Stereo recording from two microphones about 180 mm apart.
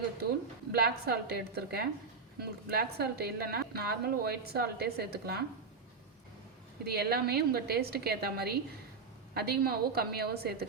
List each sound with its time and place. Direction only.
0.7 s a woman's voice: 60° right (ahead or behind)
6.8 s a woman's voice: 60° right (ahead or behind)